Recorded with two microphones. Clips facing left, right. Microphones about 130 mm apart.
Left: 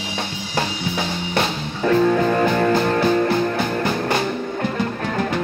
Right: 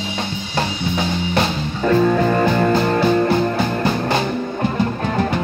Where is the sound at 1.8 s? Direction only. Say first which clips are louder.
Right 1 dB; 5° right (ahead or behind).